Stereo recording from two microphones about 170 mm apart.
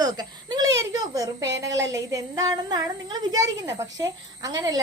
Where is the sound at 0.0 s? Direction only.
25° right (ahead or behind).